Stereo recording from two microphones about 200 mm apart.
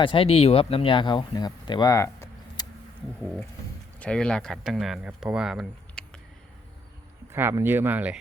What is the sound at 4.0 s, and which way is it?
Speech, 5° left (ahead or behind).